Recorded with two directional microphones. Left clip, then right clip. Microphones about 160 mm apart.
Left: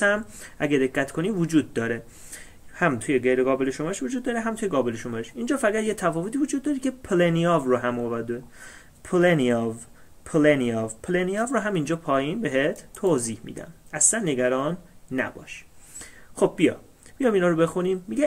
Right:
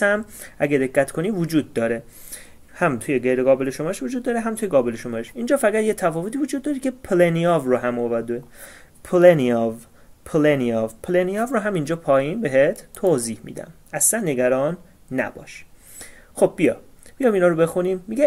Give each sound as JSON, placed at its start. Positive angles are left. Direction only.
{"t": 0.0, "sound": "speech", "side_deg": -25}